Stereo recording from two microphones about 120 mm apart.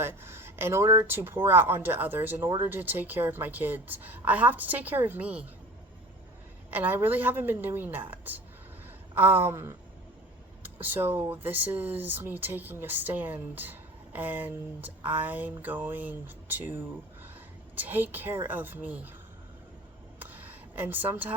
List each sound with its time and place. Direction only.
0.0 s speech: 20° right (ahead or behind)
6.7 s speech: 15° right (ahead or behind)
17.7 s speech: 15° right (ahead or behind)
20.1 s a sound: 15° right (ahead or behind)